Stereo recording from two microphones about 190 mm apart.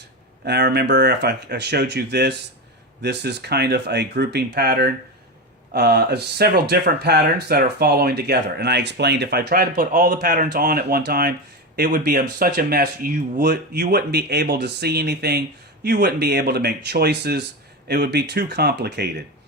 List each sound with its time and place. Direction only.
0.4 s speech: 60° right (ahead or behind); by 10.1 s 45° right (ahead or behind)
10.1 s speech: 55° right (ahead or behind)